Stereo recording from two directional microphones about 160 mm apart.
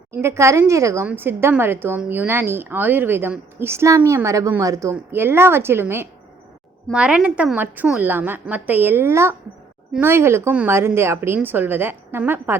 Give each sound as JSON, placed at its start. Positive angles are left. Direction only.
{"t": 0.1, "sound": "speech", "side_deg": -15}